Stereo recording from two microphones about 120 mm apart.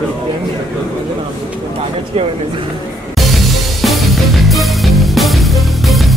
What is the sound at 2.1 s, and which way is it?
Speech, 55° right (ahead or behind).